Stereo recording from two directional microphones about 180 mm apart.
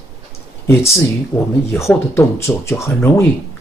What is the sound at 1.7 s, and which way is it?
Speech, 15° left (ahead or behind).